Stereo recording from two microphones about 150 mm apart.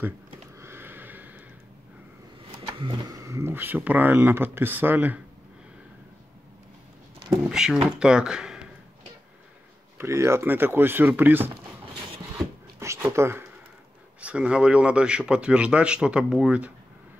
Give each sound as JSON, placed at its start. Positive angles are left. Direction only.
{"t": 0.6, "sound": "a sound", "side_deg": -15}
{"t": 2.8, "sound": "speech", "side_deg": -30}
{"t": 7.4, "sound": "speech", "side_deg": -5}
{"t": 9.9, "sound": "speech", "side_deg": -20}
{"t": 12.4, "sound": "a sound", "side_deg": -20}
{"t": 14.2, "sound": "speech", "side_deg": -5}